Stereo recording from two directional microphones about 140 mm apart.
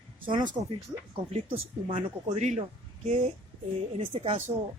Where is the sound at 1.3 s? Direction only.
45° right (ahead or behind).